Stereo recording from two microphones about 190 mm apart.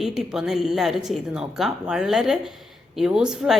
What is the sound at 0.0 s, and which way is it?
Speech, centre (ahead or behind).